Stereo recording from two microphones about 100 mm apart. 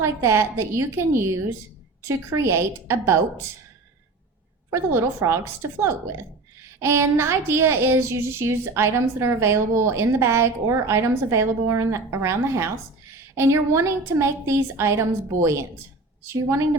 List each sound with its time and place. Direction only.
0.0 s a woman's voice: 25° right (ahead or behind)
4.7 s a woman's voice: 25° right (ahead or behind)
6.8 s a woman's voice: 25° right (ahead or behind)